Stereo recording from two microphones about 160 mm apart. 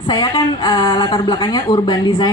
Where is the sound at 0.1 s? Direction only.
25° left (ahead or behind).